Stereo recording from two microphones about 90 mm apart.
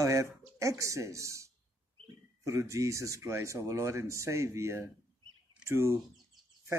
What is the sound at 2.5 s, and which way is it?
A man's voice, 35° right (ahead or behind).